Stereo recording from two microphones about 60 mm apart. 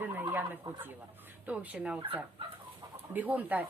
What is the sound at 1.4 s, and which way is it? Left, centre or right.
Speech, right.